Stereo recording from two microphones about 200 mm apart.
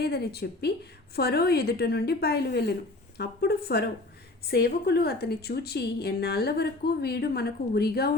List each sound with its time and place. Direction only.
0.0 s speech: 55° left (ahead or behind)